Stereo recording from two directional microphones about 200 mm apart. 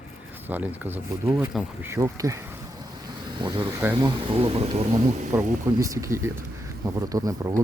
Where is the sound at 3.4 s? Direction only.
20° right (ahead or behind).